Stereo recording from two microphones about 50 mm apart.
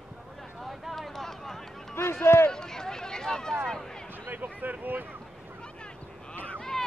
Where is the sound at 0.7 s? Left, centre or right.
Centre.